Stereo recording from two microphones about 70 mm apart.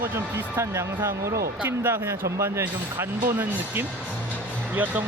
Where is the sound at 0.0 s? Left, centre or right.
Right.